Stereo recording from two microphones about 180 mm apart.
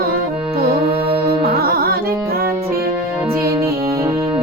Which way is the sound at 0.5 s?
60° right (ahead or behind).